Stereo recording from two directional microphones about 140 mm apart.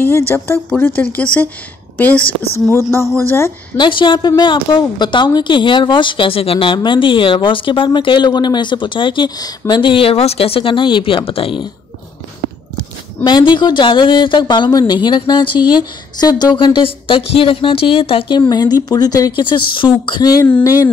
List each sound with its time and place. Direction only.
0.7 s speech: 15° left (ahead or behind)
3.7 s a woman's voice: 35° left (ahead or behind)
13.2 s a woman's voice: 35° left (ahead or behind)